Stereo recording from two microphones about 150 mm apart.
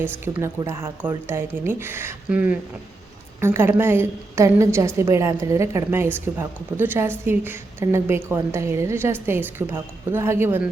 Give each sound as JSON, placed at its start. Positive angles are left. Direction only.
{"t": 0.0, "sound": "a woman's voice", "side_deg": -15}